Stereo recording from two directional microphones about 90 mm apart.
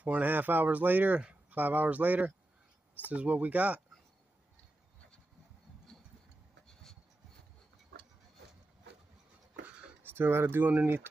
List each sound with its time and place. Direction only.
0.0 s speech: 20° right (ahead or behind)
5.9 s a sound: 5° left (ahead or behind)
10.0 s speech: 25° right (ahead or behind)